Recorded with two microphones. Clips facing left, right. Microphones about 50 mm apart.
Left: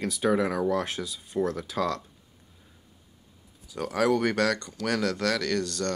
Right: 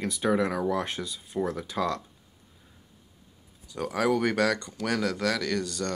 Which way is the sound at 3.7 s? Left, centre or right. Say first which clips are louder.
Left 1 dB; centre.